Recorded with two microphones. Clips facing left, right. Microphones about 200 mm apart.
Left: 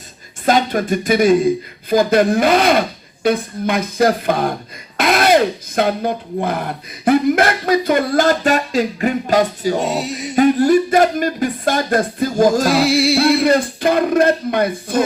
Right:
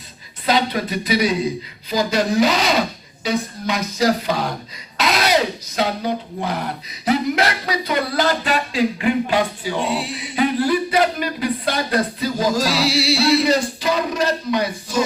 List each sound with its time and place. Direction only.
0.4 s speech: 50° left (ahead or behind)